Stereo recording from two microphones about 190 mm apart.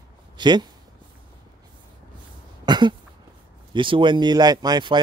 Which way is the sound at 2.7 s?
25° right (ahead or behind).